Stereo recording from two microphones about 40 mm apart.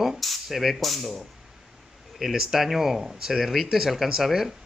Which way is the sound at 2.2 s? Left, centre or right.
Centre.